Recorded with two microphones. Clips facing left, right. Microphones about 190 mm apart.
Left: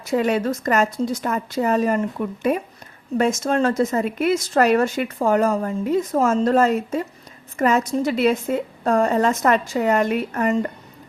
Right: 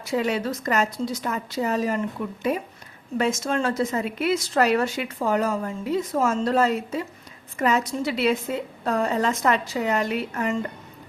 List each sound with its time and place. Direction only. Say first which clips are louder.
0.0 s speech: left 4 dB; 50° left (ahead or behind)